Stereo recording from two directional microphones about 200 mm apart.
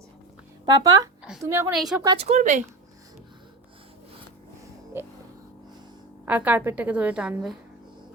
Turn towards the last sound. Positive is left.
turn(degrees=-5)  # may be behind; listen again after turning